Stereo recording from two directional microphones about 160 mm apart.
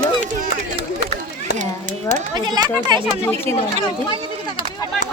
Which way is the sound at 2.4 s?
25° right (ahead or behind).